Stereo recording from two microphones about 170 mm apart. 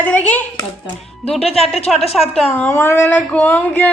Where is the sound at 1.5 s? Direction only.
Centre (ahead or behind).